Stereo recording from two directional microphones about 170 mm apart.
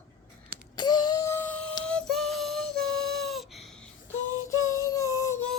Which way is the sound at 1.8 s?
5° left (ahead or behind).